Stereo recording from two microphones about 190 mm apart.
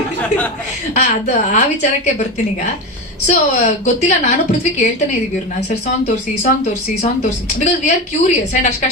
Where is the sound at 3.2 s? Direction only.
40° left (ahead or behind).